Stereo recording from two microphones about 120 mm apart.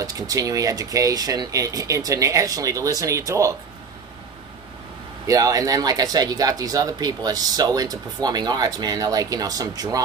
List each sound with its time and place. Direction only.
0.0 s speech: 30° right (ahead or behind)
5.2 s speech: 30° right (ahead or behind)